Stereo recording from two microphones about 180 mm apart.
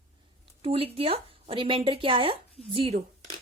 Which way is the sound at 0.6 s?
30° right (ahead or behind).